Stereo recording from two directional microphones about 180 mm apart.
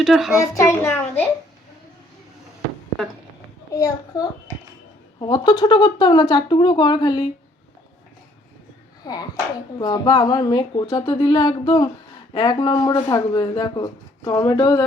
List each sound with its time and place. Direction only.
0.0 s a child's voice: centre (ahead or behind)
0.3 s a child's voice: 15° left (ahead or behind)
3.8 s speech: 20° left (ahead or behind)
9.7 s speech: 20° left (ahead or behind)